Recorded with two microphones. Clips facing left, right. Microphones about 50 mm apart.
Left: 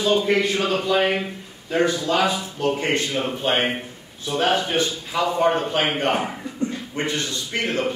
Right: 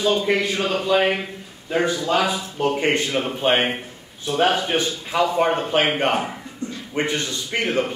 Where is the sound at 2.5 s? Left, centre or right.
Right.